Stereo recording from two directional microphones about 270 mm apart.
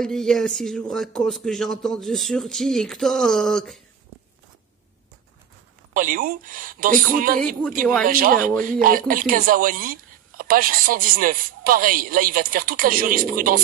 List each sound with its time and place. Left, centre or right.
0.0 s a man's voice: centre
5.9 s speech: right